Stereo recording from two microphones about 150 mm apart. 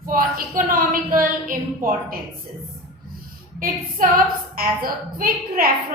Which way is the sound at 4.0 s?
65° right (ahead or behind).